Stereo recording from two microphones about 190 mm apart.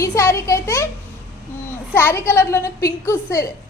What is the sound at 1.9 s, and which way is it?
A woman's voice, 10° left (ahead or behind).